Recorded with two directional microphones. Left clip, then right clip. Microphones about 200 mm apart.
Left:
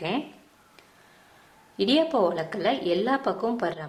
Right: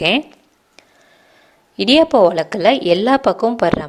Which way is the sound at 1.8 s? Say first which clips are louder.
Right 11 dB; 40° right (ahead or behind).